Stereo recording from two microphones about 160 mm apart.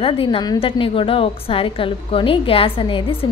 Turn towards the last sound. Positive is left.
turn(degrees=30)  # may be behind; listen again after turning